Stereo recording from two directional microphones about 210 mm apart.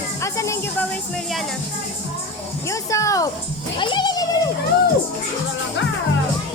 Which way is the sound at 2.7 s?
15° left (ahead or behind).